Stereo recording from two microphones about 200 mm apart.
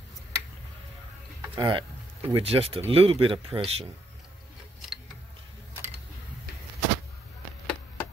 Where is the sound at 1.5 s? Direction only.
25° right (ahead or behind).